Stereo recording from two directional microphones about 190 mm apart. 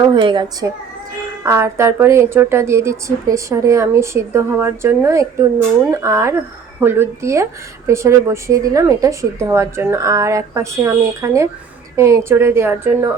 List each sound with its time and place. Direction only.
0.2 s speech: 25° right (ahead or behind)
1.5 s a woman's voice: 15° right (ahead or behind)